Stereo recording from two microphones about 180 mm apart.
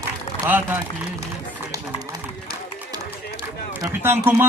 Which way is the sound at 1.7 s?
20° right (ahead or behind).